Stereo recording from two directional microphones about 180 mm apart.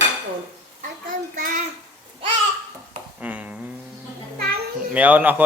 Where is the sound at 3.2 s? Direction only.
5° right (ahead or behind).